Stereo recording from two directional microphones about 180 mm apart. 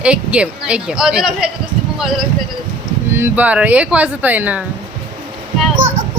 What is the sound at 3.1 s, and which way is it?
Speech, 10° right (ahead or behind).